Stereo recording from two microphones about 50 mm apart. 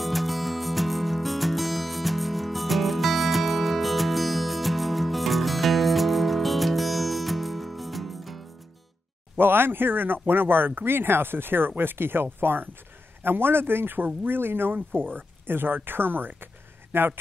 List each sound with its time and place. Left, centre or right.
0.0 s music: centre
9.4 s speech: right